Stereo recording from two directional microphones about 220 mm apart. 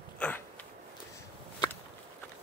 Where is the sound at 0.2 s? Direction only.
5° left (ahead or behind).